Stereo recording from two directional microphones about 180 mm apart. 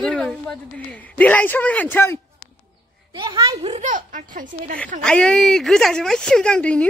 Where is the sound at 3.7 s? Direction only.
45° right (ahead or behind).